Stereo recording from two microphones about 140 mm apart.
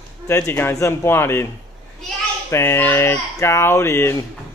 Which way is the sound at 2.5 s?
20° left (ahead or behind).